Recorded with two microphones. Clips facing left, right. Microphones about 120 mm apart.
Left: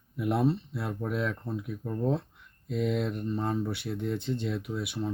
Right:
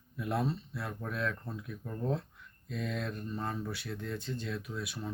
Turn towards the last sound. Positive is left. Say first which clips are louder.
# left 6 dB
turn(degrees=25)  # may be behind; listen again after turning